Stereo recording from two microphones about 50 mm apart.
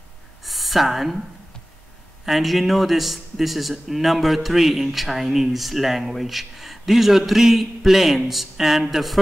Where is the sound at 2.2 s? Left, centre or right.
Centre.